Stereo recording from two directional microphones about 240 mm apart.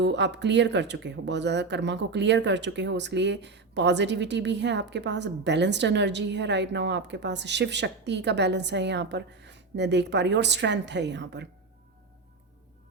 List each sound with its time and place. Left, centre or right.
0.0 s speech: right